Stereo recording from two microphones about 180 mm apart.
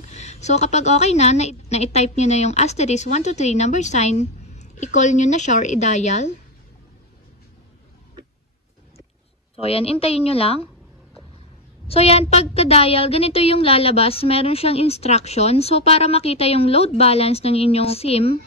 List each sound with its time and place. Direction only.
0.1 s speech: 40° left (ahead or behind)
9.6 s speech: 35° left (ahead or behind)
11.9 s speech: 35° left (ahead or behind)